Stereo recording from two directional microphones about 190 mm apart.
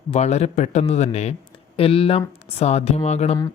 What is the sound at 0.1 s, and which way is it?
A man's voice, 35° left (ahead or behind).